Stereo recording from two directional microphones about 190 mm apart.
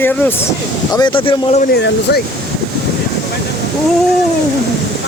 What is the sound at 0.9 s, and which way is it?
Speech, 25° left (ahead or behind).